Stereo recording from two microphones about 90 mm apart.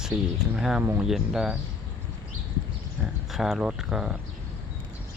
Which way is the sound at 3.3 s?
Centre (ahead or behind).